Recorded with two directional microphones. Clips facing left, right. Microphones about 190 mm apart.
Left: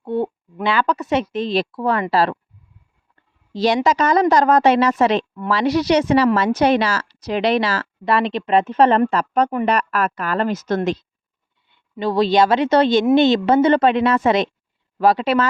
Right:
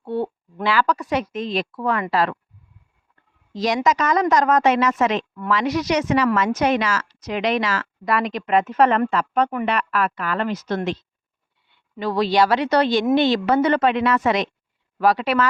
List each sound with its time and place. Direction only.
0.0 s a sound: 20° left (ahead or behind)
0.6 s a woman's voice: 20° left (ahead or behind)
3.5 s a woman's voice: 30° left (ahead or behind)
11.9 s a woman's voice: 25° left (ahead or behind)